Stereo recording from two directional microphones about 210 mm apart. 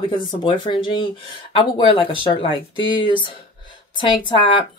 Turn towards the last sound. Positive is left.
turn(degrees=25)  # may be behind; listen again after turning